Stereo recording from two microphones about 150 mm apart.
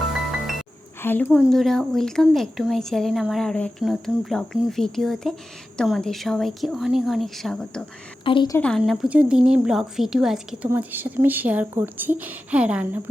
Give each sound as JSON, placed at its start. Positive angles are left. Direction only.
{"t": 1.0, "sound": "a woman's voice", "side_deg": 15}
{"t": 1.3, "sound": "speech", "side_deg": 0}
{"t": 8.2, "sound": "a woman's voice", "side_deg": 35}
{"t": 8.8, "sound": "speech", "side_deg": -5}